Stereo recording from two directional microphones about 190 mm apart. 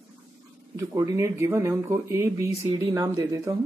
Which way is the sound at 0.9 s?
15° right (ahead or behind).